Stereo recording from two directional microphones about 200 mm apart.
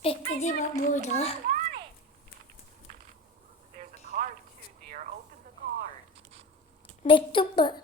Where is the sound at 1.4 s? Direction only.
45° right (ahead or behind).